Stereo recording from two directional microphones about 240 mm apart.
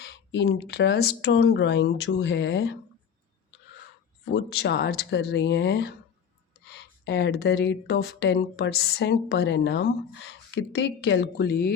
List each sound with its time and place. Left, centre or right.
0.0 s speech: left
4.3 s speech: left